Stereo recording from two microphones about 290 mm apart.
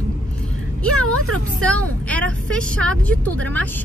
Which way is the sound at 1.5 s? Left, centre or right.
Centre.